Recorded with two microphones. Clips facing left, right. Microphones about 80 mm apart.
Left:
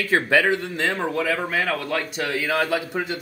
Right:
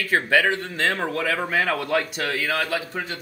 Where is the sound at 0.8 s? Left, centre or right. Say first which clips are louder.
Right 2 dB; centre.